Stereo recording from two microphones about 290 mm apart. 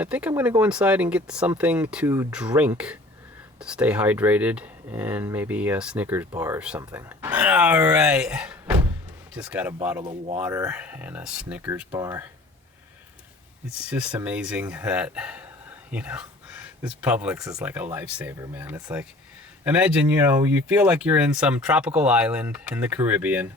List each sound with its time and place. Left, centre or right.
0.0 s speech: centre
10.0 s speech: centre
10.3 s speech: centre
13.7 s speech: centre
15.9 s a sound: centre
17.0 s speech: centre